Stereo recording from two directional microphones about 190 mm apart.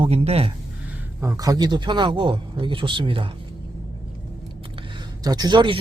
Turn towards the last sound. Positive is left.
turn(degrees=-25)  # may be behind; listen again after turning